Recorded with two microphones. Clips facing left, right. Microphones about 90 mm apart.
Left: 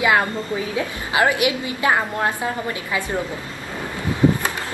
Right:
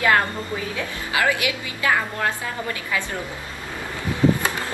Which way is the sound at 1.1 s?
25° left (ahead or behind).